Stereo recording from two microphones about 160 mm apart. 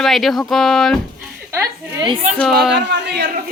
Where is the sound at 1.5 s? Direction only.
20° right (ahead or behind).